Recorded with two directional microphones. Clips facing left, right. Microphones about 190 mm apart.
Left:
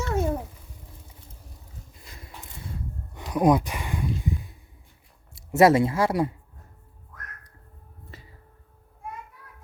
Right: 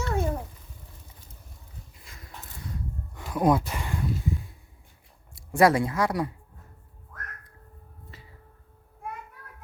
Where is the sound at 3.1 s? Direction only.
20° left (ahead or behind).